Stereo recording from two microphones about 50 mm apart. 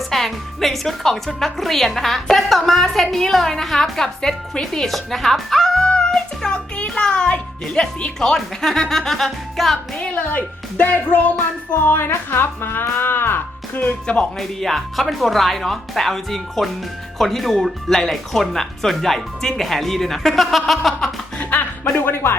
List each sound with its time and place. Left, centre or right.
0.1 s a woman's voice: centre
5.8 s music: centre
8.4 s a woman's voice: centre
10.0 s speech: left
12.8 s music: left
14.3 s a woman's voice: centre
21.3 s music: left